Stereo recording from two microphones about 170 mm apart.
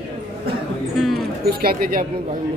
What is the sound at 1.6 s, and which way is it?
Speech, 60° right (ahead or behind).